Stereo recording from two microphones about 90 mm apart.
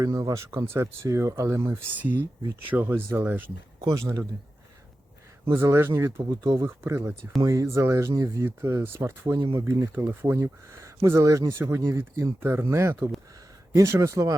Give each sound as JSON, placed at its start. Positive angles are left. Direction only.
{"t": 0.0, "sound": "speech", "side_deg": -40}
{"t": 0.6, "sound": "speech", "side_deg": -25}
{"t": 5.5, "sound": "speech", "side_deg": -30}
{"t": 8.4, "sound": "speech", "side_deg": -25}